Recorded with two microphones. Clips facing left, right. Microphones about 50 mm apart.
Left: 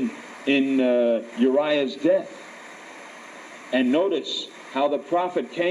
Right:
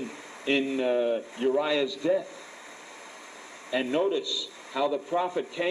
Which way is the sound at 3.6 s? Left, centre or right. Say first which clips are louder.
Left 6 dB; left.